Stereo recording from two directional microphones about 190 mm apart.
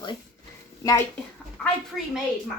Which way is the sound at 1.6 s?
Centre (ahead or behind).